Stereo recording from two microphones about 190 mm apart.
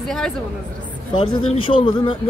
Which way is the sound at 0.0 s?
Centre (ahead or behind).